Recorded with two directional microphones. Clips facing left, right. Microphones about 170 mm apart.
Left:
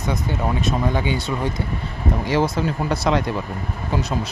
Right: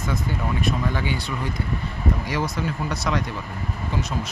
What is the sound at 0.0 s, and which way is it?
Speech, 20° left (ahead or behind).